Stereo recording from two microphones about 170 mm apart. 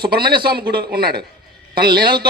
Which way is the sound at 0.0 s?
65° right (ahead or behind).